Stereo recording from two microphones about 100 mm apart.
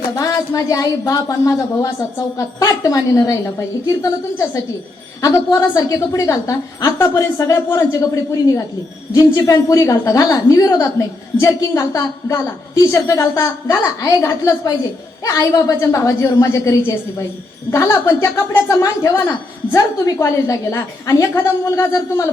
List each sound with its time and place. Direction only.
0.1 s a woman's voice: 35° left (ahead or behind)